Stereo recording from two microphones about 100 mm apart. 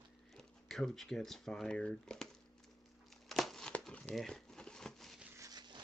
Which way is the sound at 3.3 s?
5° left (ahead or behind).